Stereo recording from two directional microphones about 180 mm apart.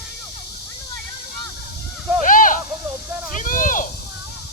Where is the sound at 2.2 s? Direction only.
50° left (ahead or behind).